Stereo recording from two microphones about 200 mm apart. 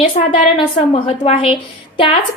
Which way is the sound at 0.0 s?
25° left (ahead or behind).